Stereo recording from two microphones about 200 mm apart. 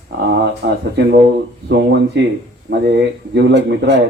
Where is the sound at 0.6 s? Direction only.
60° right (ahead or behind).